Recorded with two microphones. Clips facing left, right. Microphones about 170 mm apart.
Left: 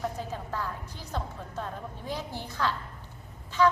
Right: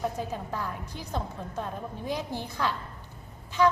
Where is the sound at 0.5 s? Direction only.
15° right (ahead or behind).